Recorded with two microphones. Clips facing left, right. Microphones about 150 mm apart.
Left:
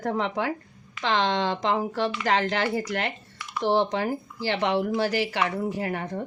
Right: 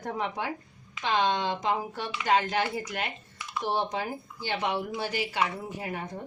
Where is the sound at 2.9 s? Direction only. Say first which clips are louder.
Left 5 dB; 85° left.